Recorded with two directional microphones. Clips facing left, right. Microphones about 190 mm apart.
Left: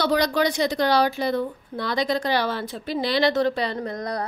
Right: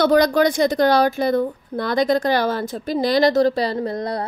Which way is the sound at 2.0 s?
50° right (ahead or behind).